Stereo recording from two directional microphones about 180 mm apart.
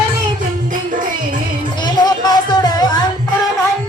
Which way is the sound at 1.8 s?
20° left (ahead or behind).